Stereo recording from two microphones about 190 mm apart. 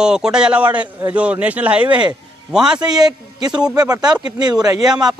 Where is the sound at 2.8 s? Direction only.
20° right (ahead or behind).